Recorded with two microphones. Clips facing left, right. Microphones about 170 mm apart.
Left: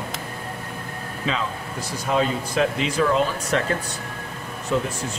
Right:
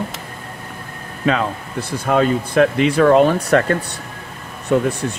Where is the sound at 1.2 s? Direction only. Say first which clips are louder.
Right 8 dB; 60° right (ahead or behind).